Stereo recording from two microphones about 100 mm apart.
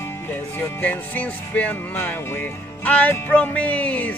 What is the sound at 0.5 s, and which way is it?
Speech, 15° left (ahead or behind).